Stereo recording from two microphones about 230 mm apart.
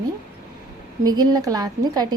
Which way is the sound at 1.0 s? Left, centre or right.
Centre.